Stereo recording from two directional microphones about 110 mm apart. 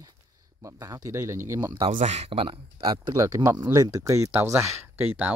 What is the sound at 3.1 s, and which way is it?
Speech, 30° right (ahead or behind).